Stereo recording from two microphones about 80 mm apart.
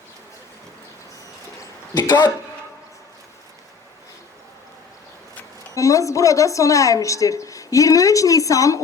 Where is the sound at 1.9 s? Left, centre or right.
Left.